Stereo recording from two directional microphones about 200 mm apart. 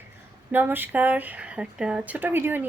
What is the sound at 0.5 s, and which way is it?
Speech, 10° right (ahead or behind).